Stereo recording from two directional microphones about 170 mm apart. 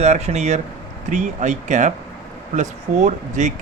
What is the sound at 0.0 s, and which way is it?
Speech, 40° right (ahead or behind).